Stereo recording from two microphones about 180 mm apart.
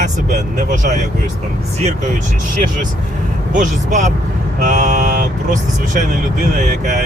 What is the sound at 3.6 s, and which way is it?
Speech, 45° right (ahead or behind).